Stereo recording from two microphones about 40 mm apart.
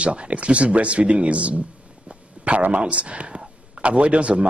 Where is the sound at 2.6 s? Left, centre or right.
Right.